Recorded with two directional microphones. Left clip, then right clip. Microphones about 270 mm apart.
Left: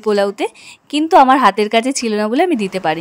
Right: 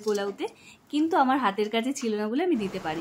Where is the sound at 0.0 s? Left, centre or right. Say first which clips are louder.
Left 13 dB; left.